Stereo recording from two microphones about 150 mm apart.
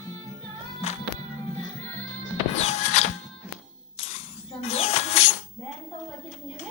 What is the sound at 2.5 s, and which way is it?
Music, 45° left (ahead or behind).